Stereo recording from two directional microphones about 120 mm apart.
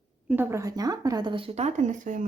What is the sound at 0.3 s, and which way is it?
Speech, 15° right (ahead or behind).